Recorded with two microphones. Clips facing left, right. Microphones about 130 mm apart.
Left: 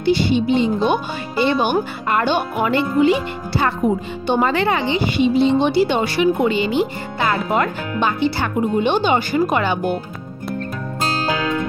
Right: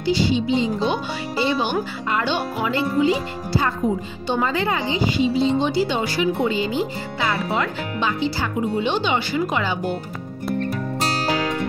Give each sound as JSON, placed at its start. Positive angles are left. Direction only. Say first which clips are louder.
{"t": 0.0, "sound": "speech", "louder": "left 3 dB", "side_deg": 55}
{"t": 7.2, "sound": "speech", "louder": "left 4 dB", "side_deg": 50}